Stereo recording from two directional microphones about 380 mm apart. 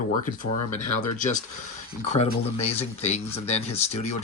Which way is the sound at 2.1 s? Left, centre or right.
Centre.